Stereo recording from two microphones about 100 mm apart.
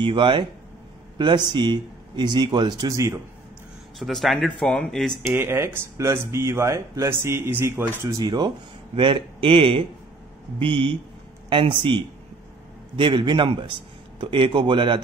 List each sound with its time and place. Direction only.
0.0 s speech: 55° right (ahead or behind)
4.0 s speech: centre (ahead or behind)
5.3 s speech: 25° right (ahead or behind)
8.2 s speech: 45° right (ahead or behind)